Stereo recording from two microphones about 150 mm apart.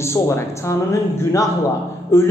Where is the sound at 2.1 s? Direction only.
15° left (ahead or behind).